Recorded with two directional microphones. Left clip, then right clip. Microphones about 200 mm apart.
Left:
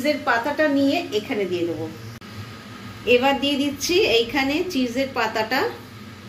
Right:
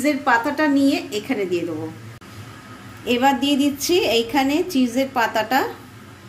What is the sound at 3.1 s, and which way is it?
A woman's voice, 60° right (ahead or behind).